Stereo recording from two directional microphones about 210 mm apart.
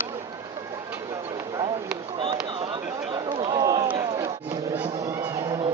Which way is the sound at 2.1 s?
25° right (ahead or behind).